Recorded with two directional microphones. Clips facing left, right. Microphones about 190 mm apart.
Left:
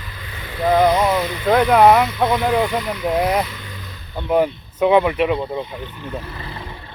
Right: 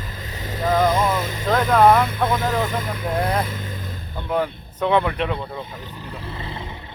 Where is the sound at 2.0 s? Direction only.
45° right (ahead or behind).